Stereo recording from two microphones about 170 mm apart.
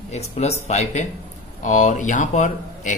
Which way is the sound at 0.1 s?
40° left (ahead or behind).